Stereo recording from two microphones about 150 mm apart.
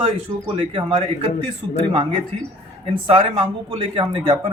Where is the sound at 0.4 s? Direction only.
35° right (ahead or behind).